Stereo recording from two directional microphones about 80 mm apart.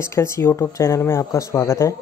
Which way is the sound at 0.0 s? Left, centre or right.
Left.